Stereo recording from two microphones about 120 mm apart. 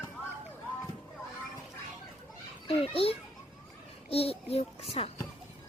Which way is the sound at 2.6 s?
50° left (ahead or behind).